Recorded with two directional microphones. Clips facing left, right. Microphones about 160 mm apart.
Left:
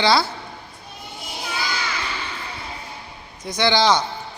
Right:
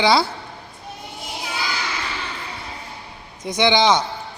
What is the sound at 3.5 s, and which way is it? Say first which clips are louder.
Speech: right 2 dB; 15° right (ahead or behind).